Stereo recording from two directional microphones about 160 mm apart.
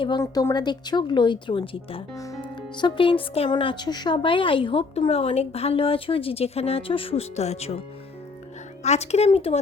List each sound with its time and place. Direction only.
0.2 s speech: 20° left (ahead or behind)
2.1 s speech: 20° left (ahead or behind); by 7.8 s 40° left (ahead or behind)
8.8 s speech: 45° left (ahead or behind)